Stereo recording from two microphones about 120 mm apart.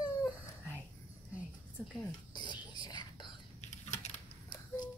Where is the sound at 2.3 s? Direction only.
40° left (ahead or behind).